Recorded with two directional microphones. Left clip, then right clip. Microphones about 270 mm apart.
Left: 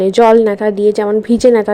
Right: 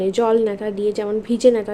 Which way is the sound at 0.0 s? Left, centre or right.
Left.